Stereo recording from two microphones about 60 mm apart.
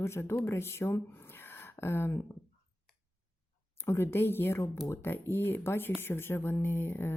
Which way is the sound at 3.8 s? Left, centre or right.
Left.